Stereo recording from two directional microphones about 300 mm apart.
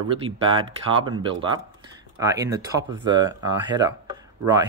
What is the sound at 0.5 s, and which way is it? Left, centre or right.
Speech, centre.